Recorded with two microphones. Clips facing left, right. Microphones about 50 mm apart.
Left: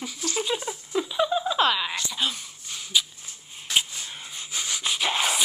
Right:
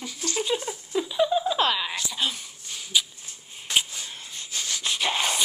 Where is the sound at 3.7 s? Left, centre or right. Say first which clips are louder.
Even; centre.